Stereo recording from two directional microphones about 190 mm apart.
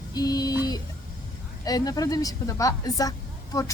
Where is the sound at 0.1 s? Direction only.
20° left (ahead or behind).